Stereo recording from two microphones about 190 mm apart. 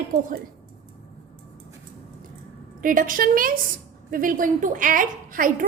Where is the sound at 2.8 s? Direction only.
45° right (ahead or behind).